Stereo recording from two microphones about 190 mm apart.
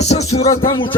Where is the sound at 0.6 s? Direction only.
25° left (ahead or behind).